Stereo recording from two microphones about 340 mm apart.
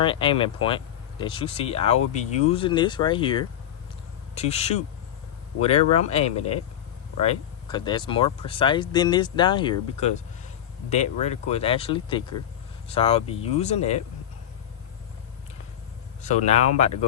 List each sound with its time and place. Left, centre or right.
0.0 s speech: centre
16.2 s speech: centre